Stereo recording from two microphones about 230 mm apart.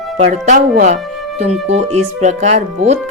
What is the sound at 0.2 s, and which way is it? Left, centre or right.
Speech, right.